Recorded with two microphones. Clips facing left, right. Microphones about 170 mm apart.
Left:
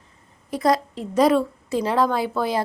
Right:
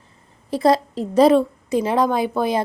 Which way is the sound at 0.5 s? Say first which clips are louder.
Right 4 dB; 30° right (ahead or behind).